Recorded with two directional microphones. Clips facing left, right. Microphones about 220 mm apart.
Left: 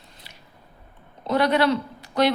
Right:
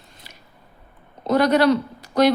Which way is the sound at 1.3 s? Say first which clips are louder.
Right 4 dB; 45° right (ahead or behind).